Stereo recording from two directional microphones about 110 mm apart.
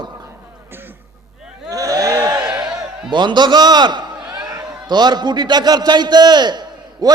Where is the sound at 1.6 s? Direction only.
30° right (ahead or behind).